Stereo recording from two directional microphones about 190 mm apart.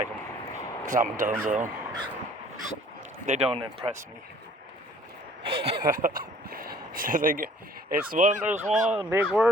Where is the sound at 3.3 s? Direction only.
30° right (ahead or behind).